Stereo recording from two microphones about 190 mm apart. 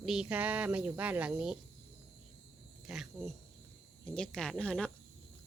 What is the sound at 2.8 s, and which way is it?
Speech, centre (ahead or behind).